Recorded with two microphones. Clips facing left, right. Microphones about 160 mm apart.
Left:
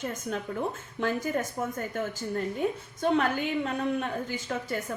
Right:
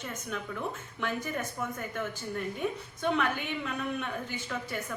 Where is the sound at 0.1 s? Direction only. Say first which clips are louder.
Left 4 dB; 35° left (ahead or behind).